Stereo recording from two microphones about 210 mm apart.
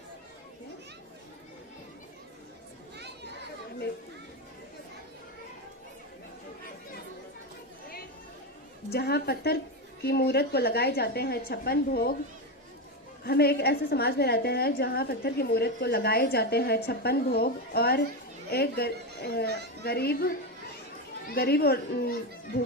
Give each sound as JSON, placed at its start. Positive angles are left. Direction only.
{"t": 8.9, "sound": "a woman's voice", "side_deg": 50}
{"t": 13.2, "sound": "a woman's voice", "side_deg": 50}